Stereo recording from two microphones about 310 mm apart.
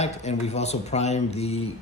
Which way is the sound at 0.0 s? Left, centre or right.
Left.